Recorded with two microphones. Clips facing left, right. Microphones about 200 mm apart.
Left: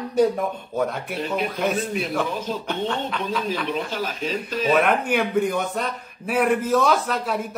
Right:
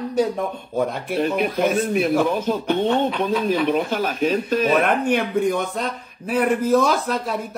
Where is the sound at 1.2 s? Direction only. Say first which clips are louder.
Right 5 dB; 60° right (ahead or behind).